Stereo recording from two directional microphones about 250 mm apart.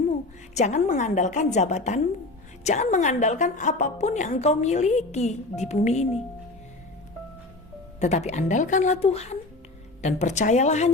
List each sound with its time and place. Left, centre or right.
0.1 s a woman's voice: left
7.9 s a woman's voice: left